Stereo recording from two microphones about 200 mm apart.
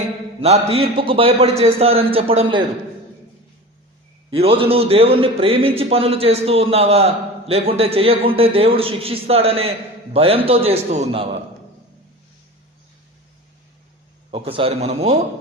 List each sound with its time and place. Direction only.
0.4 s speech: 30° right (ahead or behind)
4.4 s speech: 30° right (ahead or behind)
14.3 s a man's voice: 30° right (ahead or behind)